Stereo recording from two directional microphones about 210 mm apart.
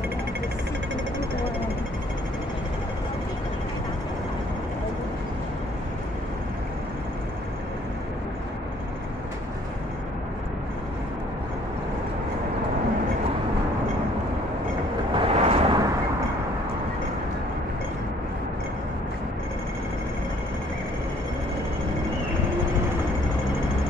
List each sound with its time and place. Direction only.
15.1 s vehicle: 25° right (ahead or behind)